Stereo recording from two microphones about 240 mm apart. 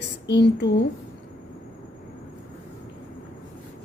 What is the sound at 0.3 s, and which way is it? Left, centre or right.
Speech, left.